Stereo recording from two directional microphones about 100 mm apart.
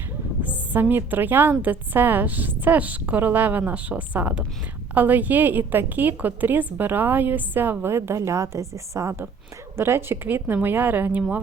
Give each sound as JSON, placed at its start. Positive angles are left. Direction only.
{"t": 0.4, "sound": "a woman's voice", "side_deg": -20}